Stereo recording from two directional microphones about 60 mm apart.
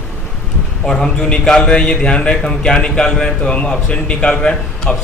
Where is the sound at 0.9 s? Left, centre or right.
Centre.